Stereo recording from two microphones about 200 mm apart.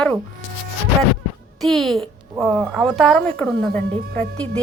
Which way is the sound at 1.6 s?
Centre (ahead or behind).